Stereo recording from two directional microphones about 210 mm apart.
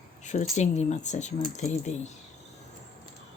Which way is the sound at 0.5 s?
35° left (ahead or behind).